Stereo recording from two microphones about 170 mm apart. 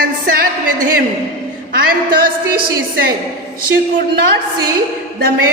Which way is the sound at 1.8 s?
60° right (ahead or behind).